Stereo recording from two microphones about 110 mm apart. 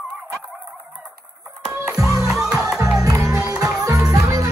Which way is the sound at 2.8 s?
30° right (ahead or behind).